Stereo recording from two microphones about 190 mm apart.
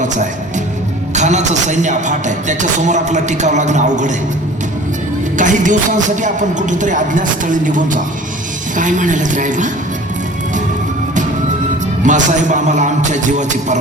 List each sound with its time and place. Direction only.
0.0 s music: 40° right (ahead or behind)
1.1 s speech: 35° right (ahead or behind)
5.4 s speech: 40° right (ahead or behind)
12.0 s speech: 40° right (ahead or behind)